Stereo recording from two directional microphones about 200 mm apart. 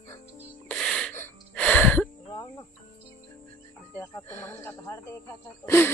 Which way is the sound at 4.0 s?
10° left (ahead or behind).